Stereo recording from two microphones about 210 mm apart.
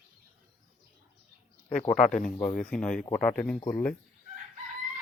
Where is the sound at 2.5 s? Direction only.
5° left (ahead or behind).